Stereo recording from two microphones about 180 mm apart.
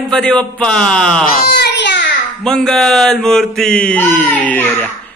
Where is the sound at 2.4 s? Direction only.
5° left (ahead or behind).